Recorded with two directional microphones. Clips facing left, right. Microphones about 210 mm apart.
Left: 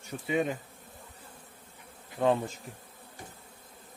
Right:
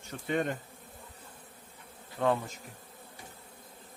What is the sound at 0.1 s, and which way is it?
Speech, 5° left (ahead or behind).